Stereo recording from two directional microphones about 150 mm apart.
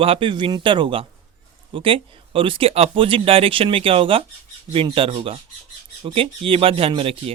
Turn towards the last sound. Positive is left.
turn(degrees=-40)  # may be behind; listen again after turning